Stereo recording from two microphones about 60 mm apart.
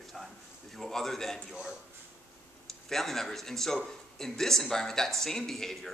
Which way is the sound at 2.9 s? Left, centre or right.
Centre.